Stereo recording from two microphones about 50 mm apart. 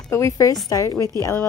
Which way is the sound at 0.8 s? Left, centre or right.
Left.